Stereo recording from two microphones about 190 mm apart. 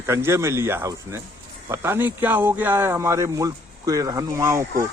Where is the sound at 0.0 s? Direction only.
15° right (ahead or behind).